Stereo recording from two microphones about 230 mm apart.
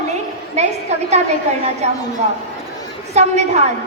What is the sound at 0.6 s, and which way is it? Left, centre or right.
Speech, right.